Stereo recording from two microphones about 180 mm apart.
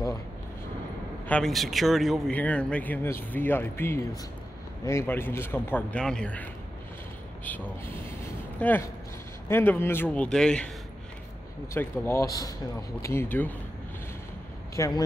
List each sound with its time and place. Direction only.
1.2 s speech: 5° left (ahead or behind)
7.4 s speech: 10° left (ahead or behind)
11.7 s speech: 10° left (ahead or behind)
14.8 s speech: 20° left (ahead or behind)